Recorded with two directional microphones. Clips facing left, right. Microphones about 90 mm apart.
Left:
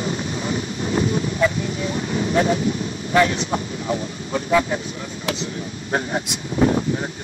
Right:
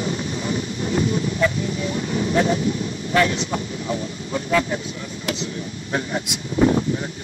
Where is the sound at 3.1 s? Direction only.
30° left (ahead or behind).